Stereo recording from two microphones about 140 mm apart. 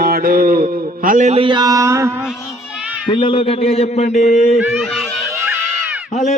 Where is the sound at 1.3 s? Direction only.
35° right (ahead or behind); by 2.1 s 20° right (ahead or behind).